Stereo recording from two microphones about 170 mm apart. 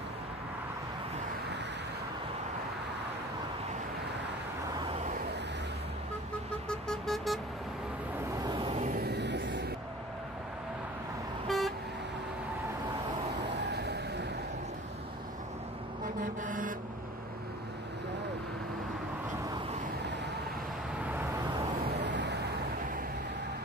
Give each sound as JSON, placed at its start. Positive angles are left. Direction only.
{"t": 6.7, "sound": "vehicle", "side_deg": 0}
{"t": 8.6, "sound": "vehicle", "side_deg": -35}
{"t": 8.9, "sound": "a sound", "side_deg": -80}
{"t": 11.4, "sound": "vehicle", "side_deg": 0}
{"t": 13.4, "sound": "music", "side_deg": -85}
{"t": 16.2, "sound": "vehicle", "side_deg": -50}
{"t": 21.0, "sound": "vehicle", "side_deg": -10}
{"t": 21.8, "sound": "vehicle", "side_deg": -85}